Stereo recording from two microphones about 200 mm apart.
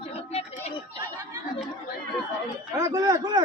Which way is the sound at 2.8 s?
20° right (ahead or behind).